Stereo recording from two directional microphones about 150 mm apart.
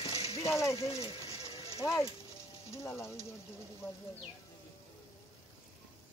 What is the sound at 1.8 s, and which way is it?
Speech, 20° left (ahead or behind).